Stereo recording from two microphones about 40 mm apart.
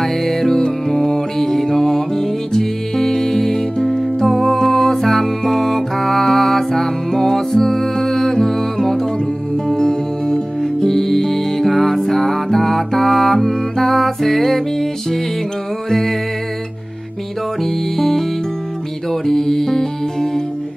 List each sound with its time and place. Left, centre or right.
0.0 s music: centre
0.6 s music: centre
17.6 s music: centre
19.2 s music: centre